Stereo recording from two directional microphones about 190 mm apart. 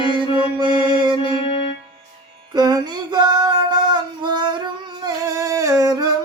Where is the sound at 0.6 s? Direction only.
20° right (ahead or behind).